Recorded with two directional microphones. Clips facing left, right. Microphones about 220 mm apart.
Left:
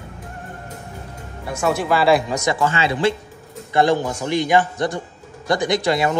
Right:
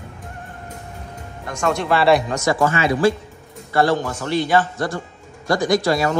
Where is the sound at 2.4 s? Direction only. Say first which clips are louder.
Right 2 dB; 25° left (ahead or behind).